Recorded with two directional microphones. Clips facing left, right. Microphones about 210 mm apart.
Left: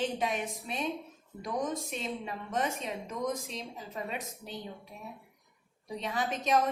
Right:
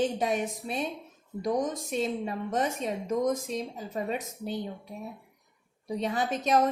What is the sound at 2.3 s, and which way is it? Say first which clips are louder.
Speech: right 4 dB; 40° right (ahead or behind).